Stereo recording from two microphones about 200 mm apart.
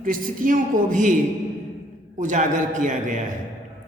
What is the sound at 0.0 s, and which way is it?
A woman's voice, 45° right (ahead or behind).